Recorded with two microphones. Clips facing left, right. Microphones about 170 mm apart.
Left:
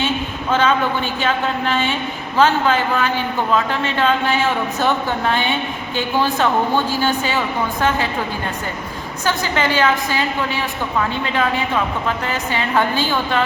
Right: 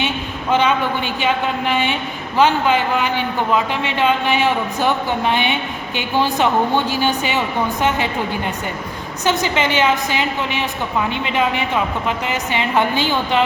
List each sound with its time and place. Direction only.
0.5 s a man's voice: 15° right (ahead or behind)
9.2 s a woman's voice: 20° right (ahead or behind)